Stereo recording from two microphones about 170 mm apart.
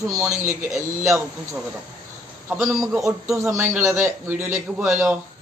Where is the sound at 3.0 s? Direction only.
20° right (ahead or behind).